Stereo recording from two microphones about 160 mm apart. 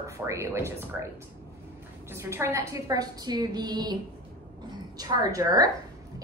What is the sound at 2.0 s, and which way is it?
A woman's voice, 15° right (ahead or behind).